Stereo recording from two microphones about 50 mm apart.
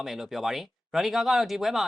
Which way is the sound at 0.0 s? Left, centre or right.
Centre.